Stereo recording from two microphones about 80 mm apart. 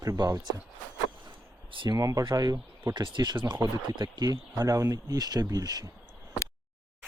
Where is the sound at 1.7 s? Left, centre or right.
Right.